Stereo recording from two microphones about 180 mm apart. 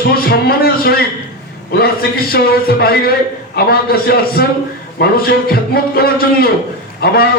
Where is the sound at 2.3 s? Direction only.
60° left (ahead or behind).